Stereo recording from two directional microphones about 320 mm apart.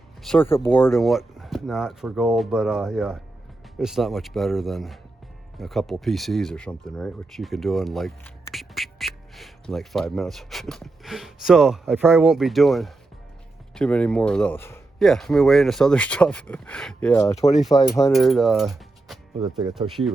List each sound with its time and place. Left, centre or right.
0.2 s speech: centre